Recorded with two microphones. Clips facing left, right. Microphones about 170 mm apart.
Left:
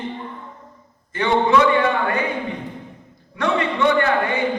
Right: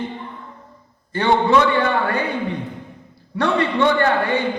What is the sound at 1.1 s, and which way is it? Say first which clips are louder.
A man's voice: right 1 dB; 35° right (ahead or behind).